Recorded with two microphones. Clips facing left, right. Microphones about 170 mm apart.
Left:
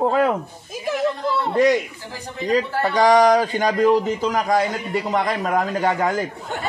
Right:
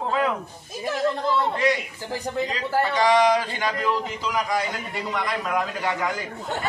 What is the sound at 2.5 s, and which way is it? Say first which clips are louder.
A man's voice: left 8 dB; 45° left (ahead or behind).